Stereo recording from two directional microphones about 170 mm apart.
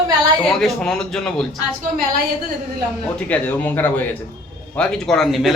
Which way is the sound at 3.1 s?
10° left (ahead or behind).